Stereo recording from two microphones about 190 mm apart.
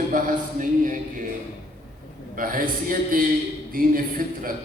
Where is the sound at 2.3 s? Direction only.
45° right (ahead or behind).